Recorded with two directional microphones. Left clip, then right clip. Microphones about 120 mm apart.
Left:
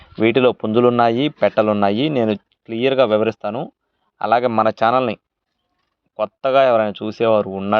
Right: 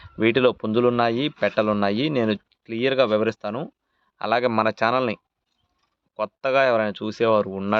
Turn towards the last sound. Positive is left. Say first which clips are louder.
# left 4 dB
turn(degrees=0)  # may be behind; listen again after turning